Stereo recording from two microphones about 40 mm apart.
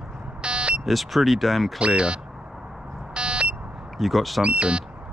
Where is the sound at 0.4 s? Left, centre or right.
Right.